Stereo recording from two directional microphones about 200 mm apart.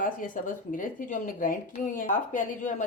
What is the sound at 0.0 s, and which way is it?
Speech, 40° left (ahead or behind).